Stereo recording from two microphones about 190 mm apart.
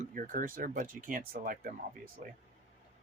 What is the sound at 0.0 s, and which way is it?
Speech, 45° right (ahead or behind).